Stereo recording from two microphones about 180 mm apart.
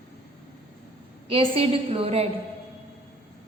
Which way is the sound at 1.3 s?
30° right (ahead or behind).